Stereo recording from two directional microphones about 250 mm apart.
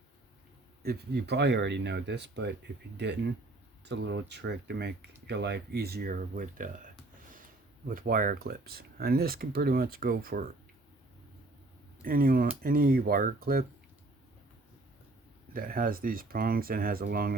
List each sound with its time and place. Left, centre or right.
0.8 s speech: right
7.9 s speech: right
12.0 s speech: right
15.5 s speech: right